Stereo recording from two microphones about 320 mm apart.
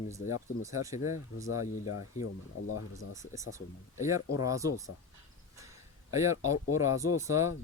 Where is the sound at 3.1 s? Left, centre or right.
Centre.